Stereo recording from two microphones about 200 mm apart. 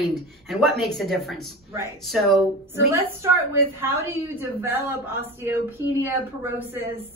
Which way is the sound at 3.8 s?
10° right (ahead or behind).